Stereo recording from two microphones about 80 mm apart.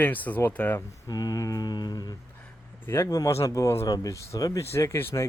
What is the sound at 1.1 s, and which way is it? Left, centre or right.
Mantra, left.